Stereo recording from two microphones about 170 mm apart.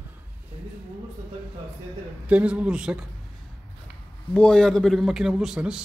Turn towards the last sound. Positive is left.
turn(degrees=-5)  # may be behind; listen again after turning